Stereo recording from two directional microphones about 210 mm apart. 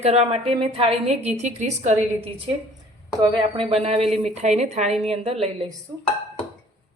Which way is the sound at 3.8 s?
30° right (ahead or behind).